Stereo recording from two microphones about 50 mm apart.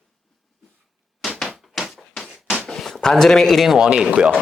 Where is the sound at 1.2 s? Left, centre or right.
Centre.